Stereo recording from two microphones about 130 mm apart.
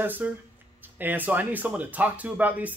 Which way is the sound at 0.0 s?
15° right (ahead or behind).